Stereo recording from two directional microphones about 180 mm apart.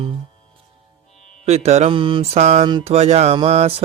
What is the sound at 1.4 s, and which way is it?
Mantra, 35° right (ahead or behind).